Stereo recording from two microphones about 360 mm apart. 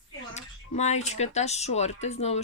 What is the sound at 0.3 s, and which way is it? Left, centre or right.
Speech, centre.